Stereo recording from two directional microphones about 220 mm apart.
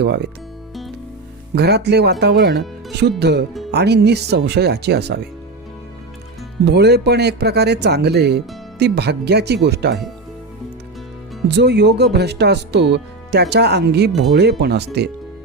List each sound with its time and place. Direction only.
0.0 s speech: 50° right (ahead or behind)
1.5 s speech: 50° right (ahead or behind)
6.7 s speech: 50° right (ahead or behind)
11.4 s speech: 50° right (ahead or behind)